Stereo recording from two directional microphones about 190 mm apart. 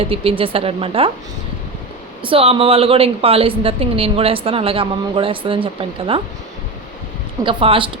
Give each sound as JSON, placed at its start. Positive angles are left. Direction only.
{"t": 0.0, "sound": "a woman's voice", "side_deg": -30}
{"t": 2.2, "sound": "a woman's voice", "side_deg": -30}
{"t": 7.4, "sound": "a woman's voice", "side_deg": -30}